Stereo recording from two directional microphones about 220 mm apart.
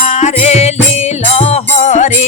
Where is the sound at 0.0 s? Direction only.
30° left (ahead or behind).